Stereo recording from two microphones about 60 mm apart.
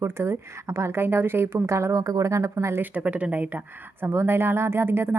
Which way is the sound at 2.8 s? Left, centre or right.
Right.